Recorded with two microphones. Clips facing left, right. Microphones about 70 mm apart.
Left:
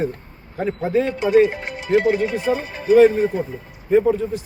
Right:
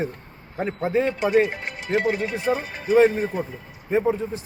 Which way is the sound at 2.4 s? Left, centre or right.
Centre.